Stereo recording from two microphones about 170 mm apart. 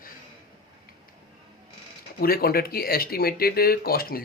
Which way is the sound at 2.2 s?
60° left (ahead or behind).